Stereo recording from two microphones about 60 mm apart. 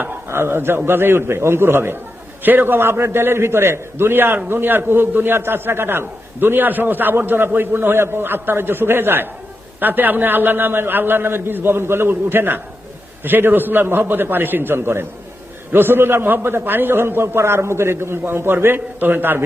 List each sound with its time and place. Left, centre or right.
0.3 s a man's voice: right